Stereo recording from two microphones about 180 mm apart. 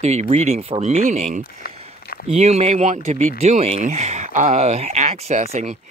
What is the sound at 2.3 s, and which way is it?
Speech, 35° right (ahead or behind).